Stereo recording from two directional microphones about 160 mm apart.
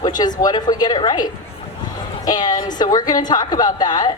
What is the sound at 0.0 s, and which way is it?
A woman's voice, 25° left (ahead or behind).